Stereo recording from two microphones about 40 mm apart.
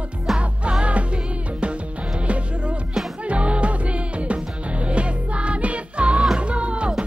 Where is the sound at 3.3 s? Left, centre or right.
Right.